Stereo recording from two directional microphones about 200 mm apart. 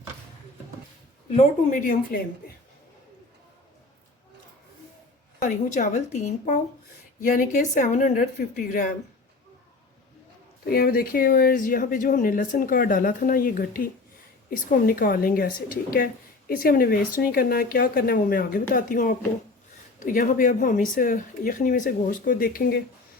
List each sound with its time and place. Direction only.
1.3 s a woman's voice: 40° left (ahead or behind)
5.4 s a woman's voice: 35° left (ahead or behind)
10.7 s speech: 50° left (ahead or behind)